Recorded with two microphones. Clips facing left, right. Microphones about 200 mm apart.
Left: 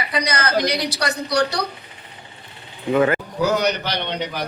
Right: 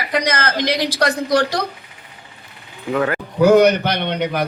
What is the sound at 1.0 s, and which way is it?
Speech, 60° right (ahead or behind).